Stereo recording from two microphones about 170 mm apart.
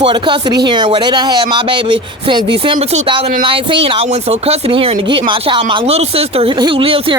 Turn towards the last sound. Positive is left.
turn(degrees=-35)  # may be behind; listen again after turning